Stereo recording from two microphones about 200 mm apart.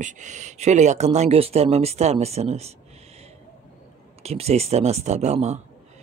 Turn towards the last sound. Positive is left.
turn(degrees=-35)  # may be behind; listen again after turning